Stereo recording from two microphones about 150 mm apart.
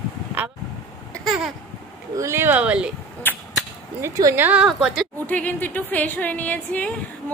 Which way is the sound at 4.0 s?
20° right (ahead or behind).